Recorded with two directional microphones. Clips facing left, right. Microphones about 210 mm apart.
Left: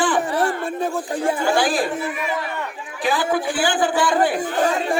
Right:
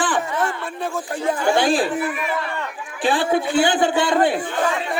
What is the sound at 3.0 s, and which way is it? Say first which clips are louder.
A man's voice: right 2 dB; 30° right (ahead or behind).